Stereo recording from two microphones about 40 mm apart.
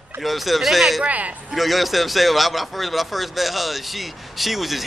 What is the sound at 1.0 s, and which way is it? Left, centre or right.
Speech, right.